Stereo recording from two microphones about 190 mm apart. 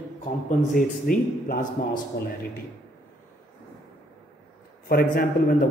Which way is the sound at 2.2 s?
55° left (ahead or behind).